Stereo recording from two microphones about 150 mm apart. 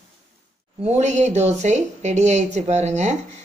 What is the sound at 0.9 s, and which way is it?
A woman's voice, 50° right (ahead or behind).